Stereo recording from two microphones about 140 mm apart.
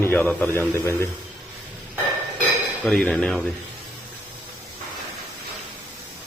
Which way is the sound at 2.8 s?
5° left (ahead or behind).